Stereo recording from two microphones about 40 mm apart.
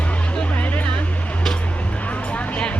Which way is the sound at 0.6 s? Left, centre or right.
Left.